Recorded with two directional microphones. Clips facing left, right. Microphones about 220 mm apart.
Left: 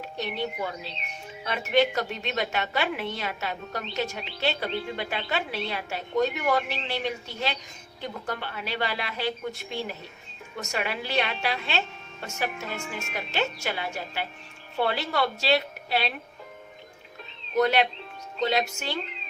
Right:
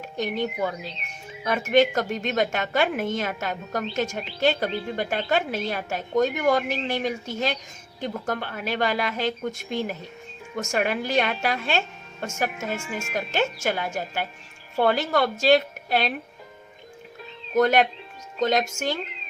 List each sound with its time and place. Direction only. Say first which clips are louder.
0.2 s a woman's voice: right 5 dB; 45° right (ahead or behind)
17.5 s a woman's voice: right 3 dB; 45° right (ahead or behind)